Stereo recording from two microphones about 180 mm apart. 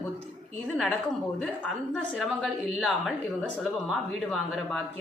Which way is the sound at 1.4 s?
Centre (ahead or behind).